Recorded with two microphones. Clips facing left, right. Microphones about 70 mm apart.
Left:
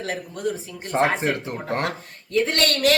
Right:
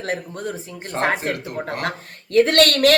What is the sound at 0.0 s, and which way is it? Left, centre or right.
Speech, right.